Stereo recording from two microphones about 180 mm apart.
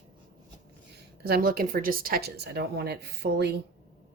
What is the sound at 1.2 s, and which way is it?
A woman's voice, 60° right (ahead or behind).